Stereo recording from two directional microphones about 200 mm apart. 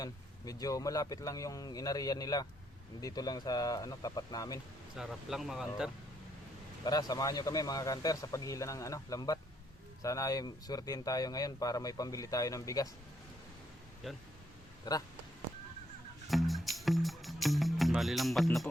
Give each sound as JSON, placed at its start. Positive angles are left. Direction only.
{"t": 0.0, "sound": "speech", "side_deg": 20}
{"t": 4.9, "sound": "speech", "side_deg": 0}
{"t": 6.8, "sound": "speech", "side_deg": 20}
{"t": 14.0, "sound": "speech", "side_deg": 0}
{"t": 14.9, "sound": "speech", "side_deg": 20}
{"t": 16.3, "sound": "music", "side_deg": 0}